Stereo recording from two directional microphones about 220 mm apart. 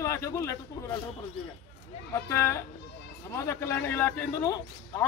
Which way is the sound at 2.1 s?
10° left (ahead or behind).